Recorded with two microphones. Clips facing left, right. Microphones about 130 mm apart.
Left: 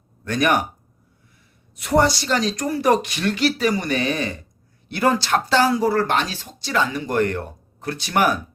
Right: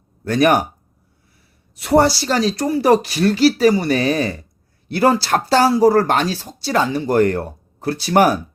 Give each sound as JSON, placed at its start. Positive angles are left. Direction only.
{"t": 0.3, "sound": "speech", "side_deg": -35}
{"t": 1.7, "sound": "speech", "side_deg": -35}